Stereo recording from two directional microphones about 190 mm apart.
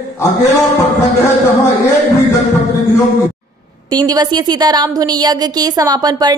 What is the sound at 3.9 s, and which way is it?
A woman's voice, 20° right (ahead or behind).